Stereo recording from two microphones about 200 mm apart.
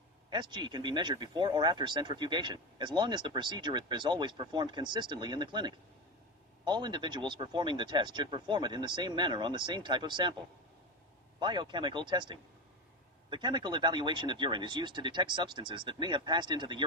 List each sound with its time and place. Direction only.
0.3 s speech: 20° right (ahead or behind)
11.3 s speech: 20° right (ahead or behind)